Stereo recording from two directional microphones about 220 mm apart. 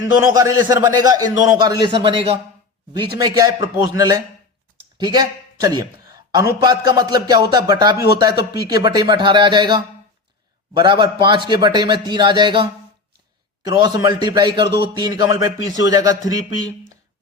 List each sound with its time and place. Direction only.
0.0 s a man's voice: 15° right (ahead or behind)